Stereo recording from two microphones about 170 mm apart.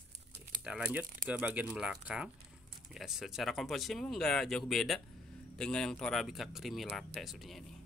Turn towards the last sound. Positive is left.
turn(degrees=0)  # may be behind; listen again after turning